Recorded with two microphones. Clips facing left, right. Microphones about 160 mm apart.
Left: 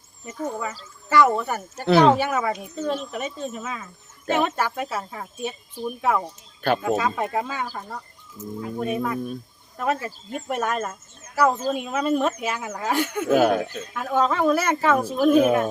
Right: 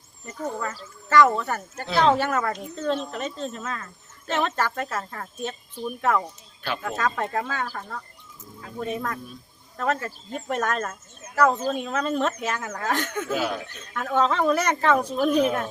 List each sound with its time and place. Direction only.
0.3 s speech: 5° left (ahead or behind)
13.3 s speech: 55° left (ahead or behind)
13.7 s speech: 10° left (ahead or behind)